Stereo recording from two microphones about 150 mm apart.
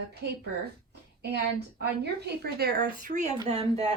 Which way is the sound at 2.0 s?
90° right.